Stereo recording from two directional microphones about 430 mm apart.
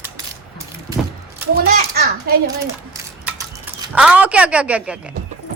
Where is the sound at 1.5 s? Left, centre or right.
Right.